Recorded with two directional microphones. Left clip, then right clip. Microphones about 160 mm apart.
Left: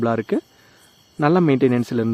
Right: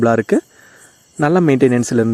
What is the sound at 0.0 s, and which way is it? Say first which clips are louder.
A man's voice: right 7 dB; 35° right (ahead or behind).